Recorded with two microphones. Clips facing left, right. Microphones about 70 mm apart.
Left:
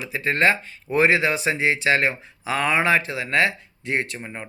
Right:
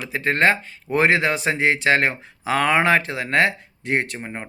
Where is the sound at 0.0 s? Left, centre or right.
Right.